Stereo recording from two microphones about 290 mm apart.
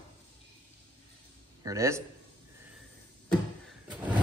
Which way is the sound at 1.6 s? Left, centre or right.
Centre.